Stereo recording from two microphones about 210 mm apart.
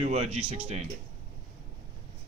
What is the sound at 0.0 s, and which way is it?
Speech, 30° right (ahead or behind).